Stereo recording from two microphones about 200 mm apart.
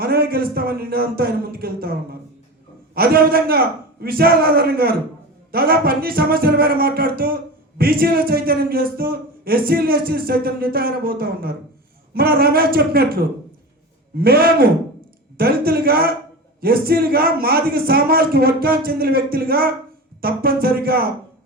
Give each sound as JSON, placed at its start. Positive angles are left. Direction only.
{"t": 0.0, "sound": "a man's voice", "side_deg": -50}
{"t": 2.9, "sound": "a man's voice", "side_deg": -50}